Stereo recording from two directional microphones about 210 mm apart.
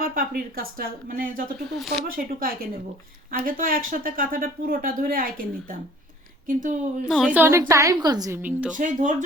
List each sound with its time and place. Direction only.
0.0 s speech: 45° right (ahead or behind)
1.7 s speech: centre (ahead or behind)
3.3 s speech: 40° right (ahead or behind)
6.5 s speech: 40° right (ahead or behind)
7.1 s a woman's voice: 5° right (ahead or behind)
8.7 s speech: 35° right (ahead or behind)